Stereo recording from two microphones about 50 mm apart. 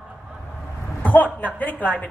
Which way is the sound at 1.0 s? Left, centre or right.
Left.